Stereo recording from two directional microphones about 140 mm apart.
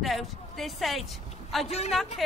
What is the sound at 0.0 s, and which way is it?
A woman's voice, centre (ahead or behind).